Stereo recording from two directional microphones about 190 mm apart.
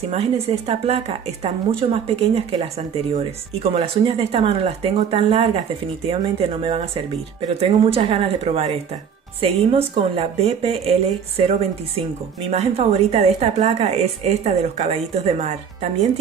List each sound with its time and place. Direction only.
0.1 s a woman's voice: 35° right (ahead or behind)